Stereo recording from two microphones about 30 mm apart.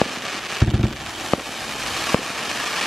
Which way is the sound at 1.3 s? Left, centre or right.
Centre.